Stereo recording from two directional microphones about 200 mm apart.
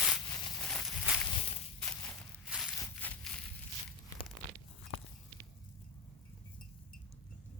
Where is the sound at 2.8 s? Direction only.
5° left (ahead or behind).